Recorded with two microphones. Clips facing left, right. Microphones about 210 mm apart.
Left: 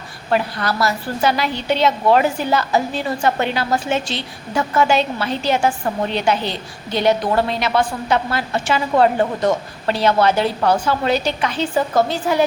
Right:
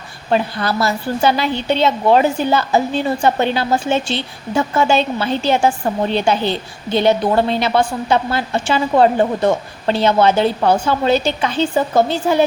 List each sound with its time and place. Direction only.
0.3 s a woman's voice: 25° right (ahead or behind)